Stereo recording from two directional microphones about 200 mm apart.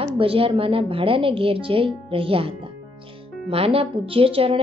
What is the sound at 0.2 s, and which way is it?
Speech, 25° right (ahead or behind).